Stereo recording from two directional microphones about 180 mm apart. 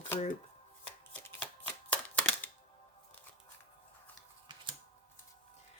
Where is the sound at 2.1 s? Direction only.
10° left (ahead or behind).